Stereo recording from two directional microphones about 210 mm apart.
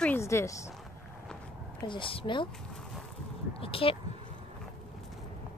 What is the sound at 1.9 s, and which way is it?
Speech, 25° left (ahead or behind).